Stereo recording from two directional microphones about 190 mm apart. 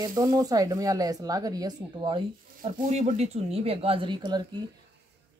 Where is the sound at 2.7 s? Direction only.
40° right (ahead or behind); by 4.4 s 25° right (ahead or behind).